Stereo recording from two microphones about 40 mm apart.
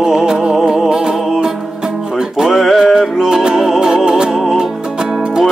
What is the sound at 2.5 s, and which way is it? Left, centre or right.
Music, centre.